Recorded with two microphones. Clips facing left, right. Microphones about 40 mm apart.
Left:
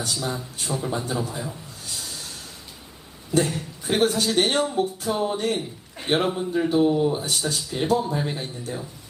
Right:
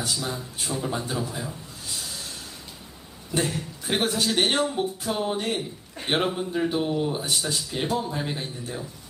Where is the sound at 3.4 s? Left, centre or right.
Centre.